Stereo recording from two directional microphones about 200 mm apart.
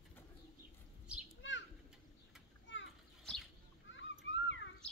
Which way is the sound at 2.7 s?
65° left (ahead or behind).